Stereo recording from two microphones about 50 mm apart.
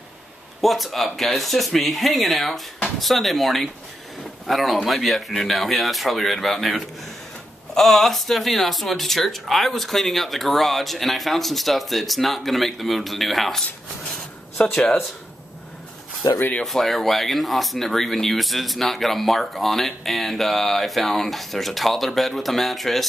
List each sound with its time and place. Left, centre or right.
0.6 s speech: centre
14.6 s speech: centre
16.6 s speech: centre